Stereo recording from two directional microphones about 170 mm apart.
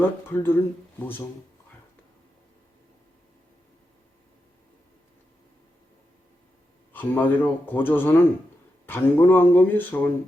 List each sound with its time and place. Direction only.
0.0 s speech: 15° left (ahead or behind)
6.9 s speech: 10° left (ahead or behind)